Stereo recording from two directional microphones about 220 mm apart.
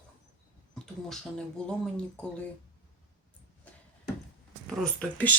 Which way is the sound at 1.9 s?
5° left (ahead or behind).